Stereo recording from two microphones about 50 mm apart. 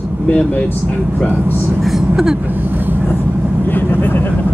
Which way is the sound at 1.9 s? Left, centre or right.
Centre.